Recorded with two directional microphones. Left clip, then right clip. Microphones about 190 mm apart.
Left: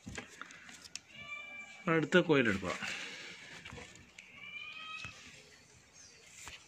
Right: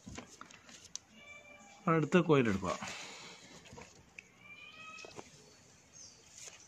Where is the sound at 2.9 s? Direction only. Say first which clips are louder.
Left 4 dB; 65° right (ahead or behind).